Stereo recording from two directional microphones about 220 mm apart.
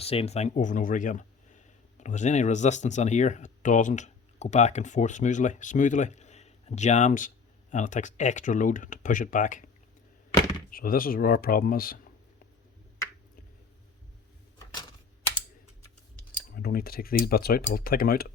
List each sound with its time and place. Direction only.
0.0 s speech: 25° left (ahead or behind)
10.7 s speech: 40° left (ahead or behind)
16.5 s speech: 45° left (ahead or behind)